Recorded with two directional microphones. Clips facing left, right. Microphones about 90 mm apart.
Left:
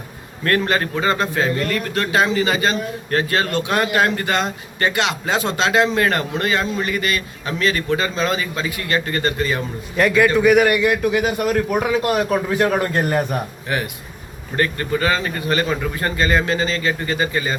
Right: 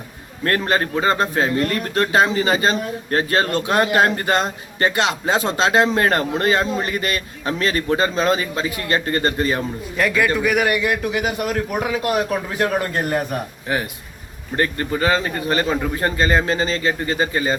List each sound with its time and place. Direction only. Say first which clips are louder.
0.4 s speech: left 1 dB; 30° right (ahead or behind)
10.0 s a man's voice: left 4 dB; centre (ahead or behind)
13.7 s a man's voice: even; 30° right (ahead or behind)